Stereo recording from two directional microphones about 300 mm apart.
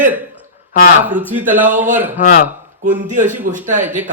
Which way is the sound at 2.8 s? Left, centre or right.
Right.